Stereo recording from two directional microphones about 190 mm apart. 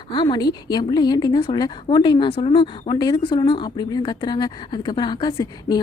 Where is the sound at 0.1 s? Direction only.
25° left (ahead or behind).